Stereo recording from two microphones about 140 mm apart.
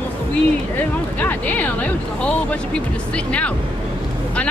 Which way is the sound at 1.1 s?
10° left (ahead or behind).